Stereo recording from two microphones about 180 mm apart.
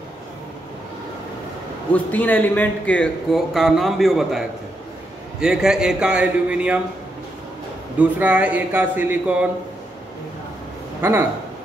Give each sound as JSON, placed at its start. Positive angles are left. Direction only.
{"t": 1.9, "sound": "speech", "side_deg": 10}
{"t": 8.0, "sound": "a man's voice", "side_deg": -10}
{"t": 11.0, "sound": "speech", "side_deg": -10}